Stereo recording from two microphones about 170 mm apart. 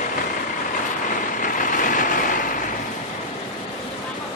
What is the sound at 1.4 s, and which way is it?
Vehicle, 50° left (ahead or behind).